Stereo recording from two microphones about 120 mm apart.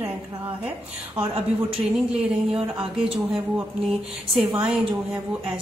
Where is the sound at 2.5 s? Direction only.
50° right (ahead or behind).